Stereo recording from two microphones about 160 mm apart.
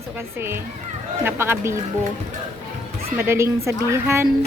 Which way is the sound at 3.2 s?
15° right (ahead or behind).